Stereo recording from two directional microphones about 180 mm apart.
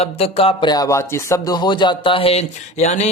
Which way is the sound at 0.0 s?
35° left (ahead or behind).